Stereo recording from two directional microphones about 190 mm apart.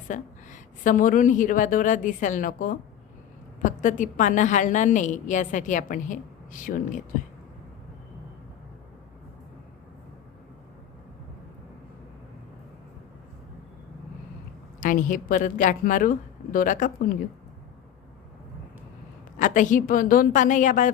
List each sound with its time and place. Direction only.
0.1 s a woman's voice: 45° left (ahead or behind)
14.8 s a woman's voice: 45° left (ahead or behind)
19.4 s a woman's voice: 40° left (ahead or behind)